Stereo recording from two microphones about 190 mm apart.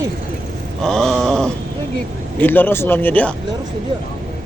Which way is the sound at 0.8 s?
Centre (ahead or behind).